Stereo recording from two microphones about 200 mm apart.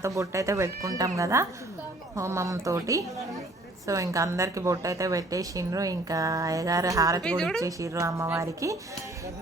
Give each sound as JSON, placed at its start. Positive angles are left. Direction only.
{"t": 0.0, "sound": "a woman's voice", "side_deg": -15}
{"t": 7.2, "sound": "speech", "side_deg": 5}
{"t": 7.6, "sound": "a woman's voice", "side_deg": -15}